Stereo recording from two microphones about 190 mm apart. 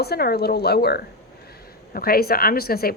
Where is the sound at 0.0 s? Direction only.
55° left (ahead or behind).